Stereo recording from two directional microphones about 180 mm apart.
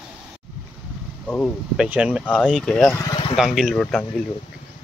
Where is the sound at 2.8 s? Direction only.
20° left (ahead or behind).